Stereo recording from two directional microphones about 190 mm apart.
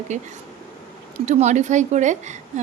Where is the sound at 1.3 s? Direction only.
35° right (ahead or behind).